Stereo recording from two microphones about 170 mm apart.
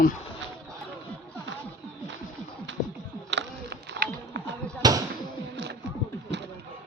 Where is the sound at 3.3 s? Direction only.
80° right.